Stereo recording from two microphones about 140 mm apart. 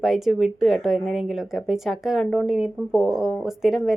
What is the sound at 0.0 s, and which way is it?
Speech, centre (ahead or behind).